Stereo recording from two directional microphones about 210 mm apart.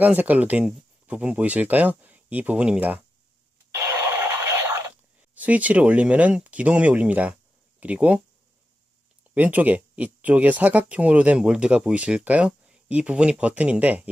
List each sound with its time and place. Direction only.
0.0 s speech: 10° right (ahead or behind)
3.8 s a sound: 10° right (ahead or behind)
7.8 s speech: 5° right (ahead or behind)
9.3 s speech: 5° right (ahead or behind)